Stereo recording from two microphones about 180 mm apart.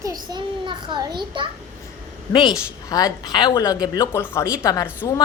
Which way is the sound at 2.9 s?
20° left (ahead or behind).